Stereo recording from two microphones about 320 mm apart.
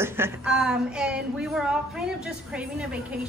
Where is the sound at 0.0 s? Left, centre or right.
Centre.